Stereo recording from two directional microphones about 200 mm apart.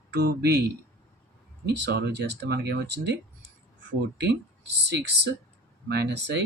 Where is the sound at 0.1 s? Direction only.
55° right (ahead or behind).